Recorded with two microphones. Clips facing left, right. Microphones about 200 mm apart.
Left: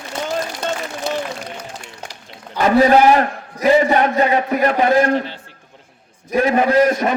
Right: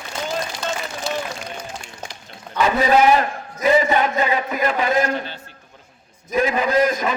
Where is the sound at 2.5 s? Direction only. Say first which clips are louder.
Left 4 dB; 45° left (ahead or behind).